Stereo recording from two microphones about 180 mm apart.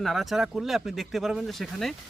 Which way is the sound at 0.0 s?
Centre (ahead or behind).